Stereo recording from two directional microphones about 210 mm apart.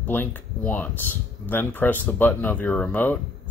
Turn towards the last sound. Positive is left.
turn(degrees=10)  # may be behind; listen again after turning